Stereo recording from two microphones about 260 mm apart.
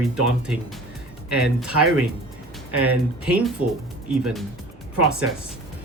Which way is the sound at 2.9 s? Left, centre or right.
Centre.